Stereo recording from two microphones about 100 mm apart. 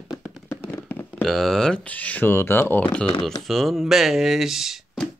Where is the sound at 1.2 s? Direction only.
Centre (ahead or behind).